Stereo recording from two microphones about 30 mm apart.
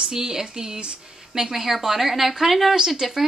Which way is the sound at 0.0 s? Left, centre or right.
Right.